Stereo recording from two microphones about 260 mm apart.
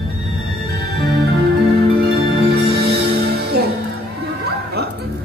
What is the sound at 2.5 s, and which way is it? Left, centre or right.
Music, right.